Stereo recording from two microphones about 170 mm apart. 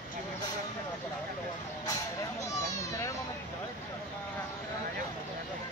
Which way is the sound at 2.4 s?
20° left (ahead or behind).